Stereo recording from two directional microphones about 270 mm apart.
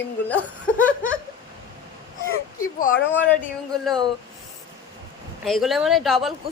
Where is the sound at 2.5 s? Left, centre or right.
Left.